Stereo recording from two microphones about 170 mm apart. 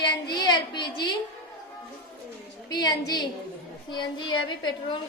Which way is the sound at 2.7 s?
25° left (ahead or behind).